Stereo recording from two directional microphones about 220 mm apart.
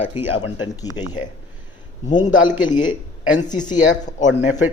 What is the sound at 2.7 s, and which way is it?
Speech, 20° left (ahead or behind).